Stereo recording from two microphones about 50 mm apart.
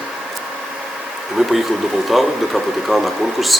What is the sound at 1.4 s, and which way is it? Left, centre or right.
Speech, centre.